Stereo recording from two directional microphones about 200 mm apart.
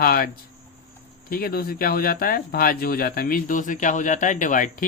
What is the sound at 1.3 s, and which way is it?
A man's voice, 50° left (ahead or behind).